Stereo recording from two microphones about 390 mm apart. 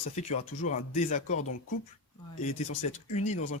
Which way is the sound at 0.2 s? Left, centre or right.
Centre.